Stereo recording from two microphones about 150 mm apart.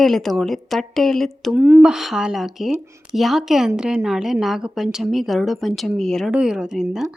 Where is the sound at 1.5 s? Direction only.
10° right (ahead or behind).